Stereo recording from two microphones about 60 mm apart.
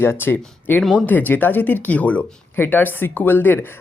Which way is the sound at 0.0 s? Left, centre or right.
Left.